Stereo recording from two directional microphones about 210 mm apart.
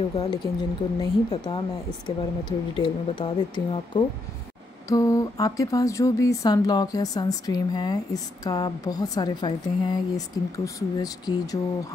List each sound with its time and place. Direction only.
0.2 s speech: 20° left (ahead or behind)